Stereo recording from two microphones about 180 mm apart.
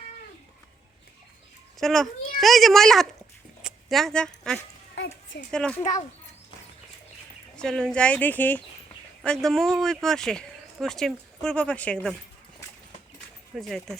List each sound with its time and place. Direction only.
1.8 s speech: 5° left (ahead or behind)
4.9 s a sound: 90° left
5.5 s speech: 5° left (ahead or behind)
7.5 s speech: 5° left (ahead or behind)
13.6 s speech: centre (ahead or behind)